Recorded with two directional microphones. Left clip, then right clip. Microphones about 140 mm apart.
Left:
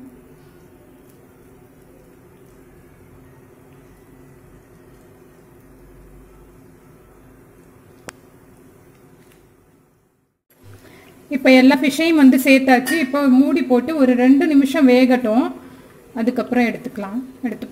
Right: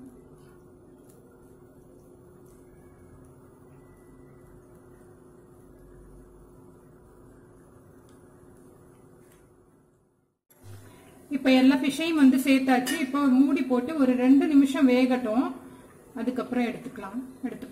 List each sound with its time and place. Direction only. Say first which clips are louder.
11.2 s a woman's voice: left 10 dB; 50° left (ahead or behind)